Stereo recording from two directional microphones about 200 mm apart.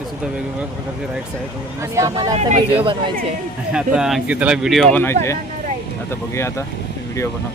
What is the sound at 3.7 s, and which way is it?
Speech, 5° right (ahead or behind).